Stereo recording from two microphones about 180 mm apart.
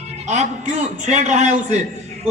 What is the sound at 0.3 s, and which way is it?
A man's voice, 40° right (ahead or behind).